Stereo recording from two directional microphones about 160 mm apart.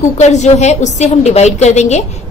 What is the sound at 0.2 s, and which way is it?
A woman's voice, 45° left (ahead or behind).